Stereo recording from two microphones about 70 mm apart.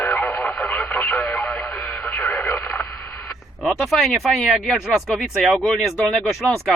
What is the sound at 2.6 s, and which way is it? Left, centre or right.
Speech, centre.